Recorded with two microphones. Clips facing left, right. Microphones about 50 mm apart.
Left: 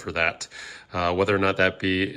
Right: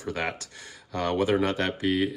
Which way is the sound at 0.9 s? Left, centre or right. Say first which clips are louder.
Left 3 dB; left.